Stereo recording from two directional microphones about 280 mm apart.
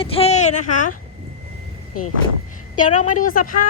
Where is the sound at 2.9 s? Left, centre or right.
Left.